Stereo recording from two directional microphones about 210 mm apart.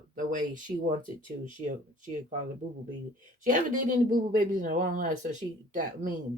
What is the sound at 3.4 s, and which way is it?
Speech, 40° right (ahead or behind).